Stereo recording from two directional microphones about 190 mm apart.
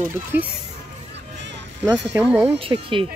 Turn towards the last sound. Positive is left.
turn(degrees=-25)  # may be behind; listen again after turning